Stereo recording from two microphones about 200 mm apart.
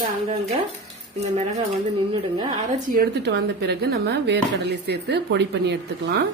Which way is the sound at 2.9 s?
50° right (ahead or behind).